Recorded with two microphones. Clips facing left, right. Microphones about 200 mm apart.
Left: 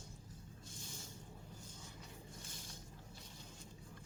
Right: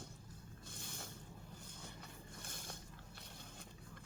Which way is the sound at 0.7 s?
60° right (ahead or behind).